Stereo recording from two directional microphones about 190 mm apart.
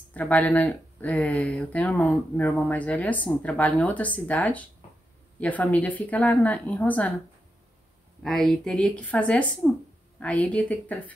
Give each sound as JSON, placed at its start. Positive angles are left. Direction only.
{"t": 0.1, "sound": "speech", "side_deg": 10}
{"t": 8.2, "sound": "speech", "side_deg": 0}